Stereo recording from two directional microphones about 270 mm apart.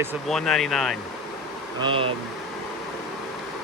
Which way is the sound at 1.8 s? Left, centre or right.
Centre.